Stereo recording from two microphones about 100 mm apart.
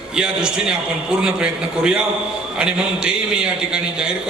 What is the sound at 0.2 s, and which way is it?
A man's voice, 10° right (ahead or behind).